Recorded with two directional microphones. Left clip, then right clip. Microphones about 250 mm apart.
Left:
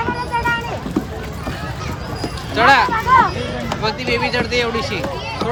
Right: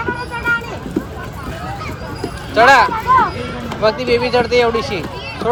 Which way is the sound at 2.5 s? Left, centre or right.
Centre.